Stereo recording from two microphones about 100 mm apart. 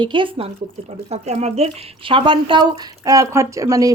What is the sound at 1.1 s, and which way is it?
Speech, 90° right.